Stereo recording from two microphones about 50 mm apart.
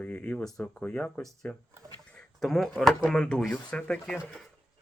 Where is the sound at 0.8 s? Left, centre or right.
Left.